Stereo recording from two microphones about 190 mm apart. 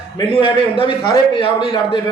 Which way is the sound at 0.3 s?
25° left (ahead or behind).